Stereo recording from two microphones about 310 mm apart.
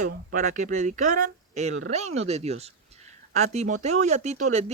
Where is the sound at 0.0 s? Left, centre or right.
Right.